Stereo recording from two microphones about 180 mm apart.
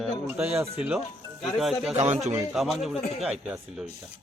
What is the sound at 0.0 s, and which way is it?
Music, centre (ahead or behind).